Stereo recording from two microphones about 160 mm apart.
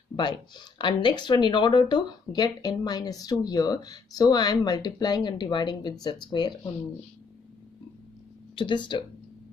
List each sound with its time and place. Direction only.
0.1 s a sound: 5° left (ahead or behind)
0.7 s speech: 30° left (ahead or behind)
8.5 s speech: 30° left (ahead or behind)